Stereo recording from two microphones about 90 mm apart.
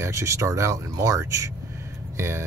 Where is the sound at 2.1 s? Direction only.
30° right (ahead or behind).